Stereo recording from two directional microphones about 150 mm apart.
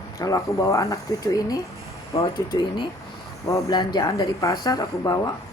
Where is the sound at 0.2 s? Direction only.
20° left (ahead or behind).